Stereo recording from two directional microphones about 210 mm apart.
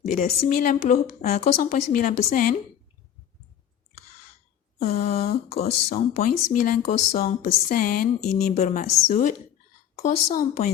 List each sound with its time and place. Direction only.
0.0 s a woman's voice: 35° left (ahead or behind)
4.8 s a woman's voice: 30° left (ahead or behind)
10.0 s a woman's voice: 30° left (ahead or behind)